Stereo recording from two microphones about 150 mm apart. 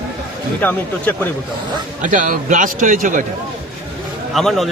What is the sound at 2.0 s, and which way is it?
Speech, 65° right (ahead or behind).